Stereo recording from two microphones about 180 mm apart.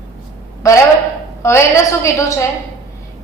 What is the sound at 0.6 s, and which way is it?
A woman's voice, 15° left (ahead or behind).